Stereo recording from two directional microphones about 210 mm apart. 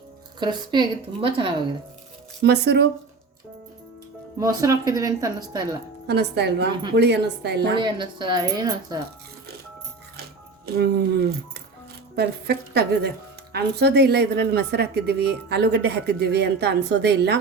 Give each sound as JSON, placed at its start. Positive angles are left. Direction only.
{"t": 0.3, "sound": "a woman's voice", "side_deg": -20}
{"t": 2.4, "sound": "a woman's voice", "side_deg": -50}
{"t": 4.4, "sound": "speech", "side_deg": -15}
{"t": 6.1, "sound": "a woman's voice", "side_deg": -55}
{"t": 7.8, "sound": "a woman's voice", "side_deg": -20}
{"t": 10.8, "sound": "a woman's voice", "side_deg": -50}